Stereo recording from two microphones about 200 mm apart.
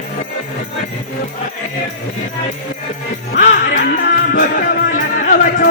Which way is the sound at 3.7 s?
45° left (ahead or behind).